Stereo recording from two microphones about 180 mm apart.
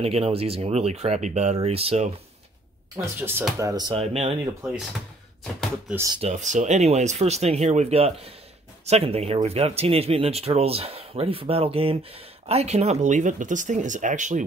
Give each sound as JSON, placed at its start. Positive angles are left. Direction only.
{"t": 0.0, "sound": "speech", "side_deg": -30}
{"t": 3.2, "sound": "speech", "side_deg": -10}
{"t": 3.9, "sound": "speech", "side_deg": -30}
{"t": 5.4, "sound": "speech", "side_deg": 5}
{"t": 6.2, "sound": "speech", "side_deg": -45}